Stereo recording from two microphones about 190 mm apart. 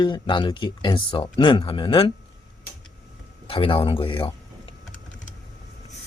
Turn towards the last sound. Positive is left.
turn(degrees=25)  # may be behind; listen again after turning